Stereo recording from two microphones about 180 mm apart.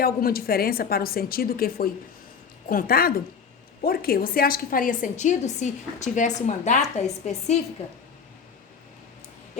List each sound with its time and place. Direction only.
0.0 s a woman's voice: 55° left (ahead or behind); by 7.6 s 40° left (ahead or behind)